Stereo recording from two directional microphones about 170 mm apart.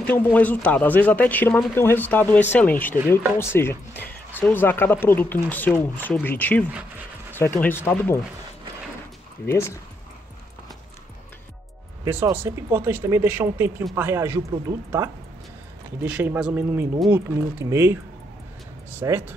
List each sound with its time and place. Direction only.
0.0 s speech: 10° left (ahead or behind)
6.7 s a sound: 10° right (ahead or behind)
7.3 s speech: 15° left (ahead or behind)
12.0 s speech: 15° right (ahead or behind)